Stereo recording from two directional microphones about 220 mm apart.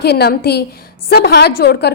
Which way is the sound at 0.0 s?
45° left (ahead or behind).